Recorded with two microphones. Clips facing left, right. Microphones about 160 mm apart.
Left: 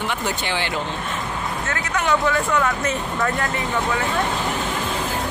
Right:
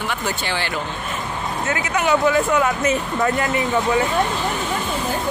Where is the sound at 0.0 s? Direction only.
20° left (ahead or behind).